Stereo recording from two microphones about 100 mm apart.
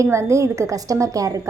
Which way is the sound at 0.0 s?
30° right (ahead or behind).